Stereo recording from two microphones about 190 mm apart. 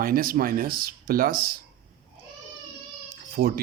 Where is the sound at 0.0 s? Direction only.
50° right (ahead or behind).